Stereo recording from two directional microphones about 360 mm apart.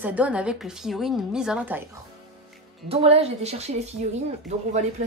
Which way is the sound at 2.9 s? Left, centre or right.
Centre.